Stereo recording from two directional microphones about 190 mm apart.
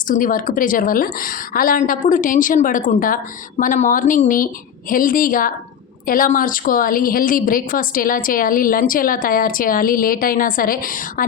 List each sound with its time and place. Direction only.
0.1 s a woman's voice: 45° left (ahead or behind)